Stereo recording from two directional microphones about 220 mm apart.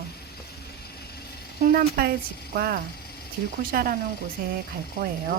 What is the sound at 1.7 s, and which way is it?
Speech, 45° right (ahead or behind).